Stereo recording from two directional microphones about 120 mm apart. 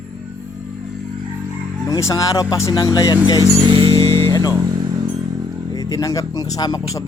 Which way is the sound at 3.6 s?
45° right (ahead or behind).